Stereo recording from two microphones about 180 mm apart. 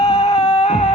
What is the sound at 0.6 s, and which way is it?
Music, 35° left (ahead or behind).